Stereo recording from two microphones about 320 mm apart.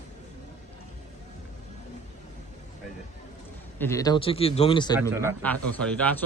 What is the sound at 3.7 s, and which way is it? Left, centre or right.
Speech, centre.